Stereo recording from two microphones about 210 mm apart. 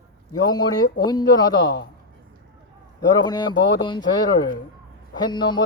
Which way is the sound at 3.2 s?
20° left (ahead or behind).